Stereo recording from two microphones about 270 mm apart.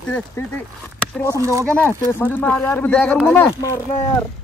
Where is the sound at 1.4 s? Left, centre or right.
Centre.